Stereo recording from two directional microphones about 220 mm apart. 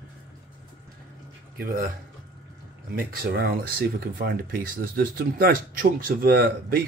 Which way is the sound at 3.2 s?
45° right (ahead or behind).